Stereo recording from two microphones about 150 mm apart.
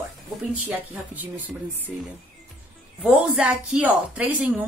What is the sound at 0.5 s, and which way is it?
A woman's voice, 10° right (ahead or behind).